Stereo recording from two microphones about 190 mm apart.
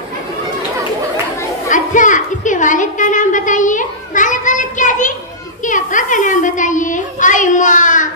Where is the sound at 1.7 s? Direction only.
40° left (ahead or behind).